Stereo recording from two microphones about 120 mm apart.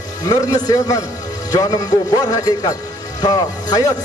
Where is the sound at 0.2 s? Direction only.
35° left (ahead or behind).